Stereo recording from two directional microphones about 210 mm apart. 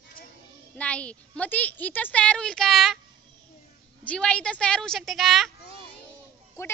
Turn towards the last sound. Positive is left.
turn(degrees=15)  # may be behind; listen again after turning